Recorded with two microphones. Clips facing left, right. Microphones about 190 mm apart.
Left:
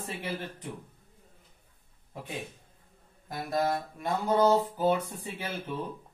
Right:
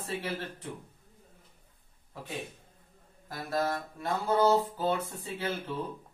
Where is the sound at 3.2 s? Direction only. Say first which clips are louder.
Left 2 dB; 15° left (ahead or behind).